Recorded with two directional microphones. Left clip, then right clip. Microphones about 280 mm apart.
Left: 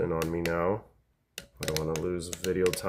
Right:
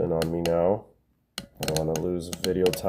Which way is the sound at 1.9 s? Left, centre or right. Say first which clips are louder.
Right 3 dB; centre.